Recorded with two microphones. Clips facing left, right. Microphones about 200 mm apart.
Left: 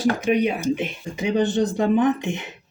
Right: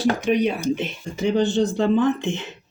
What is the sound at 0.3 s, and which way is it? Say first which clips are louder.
Speech: even; 5° left (ahead or behind).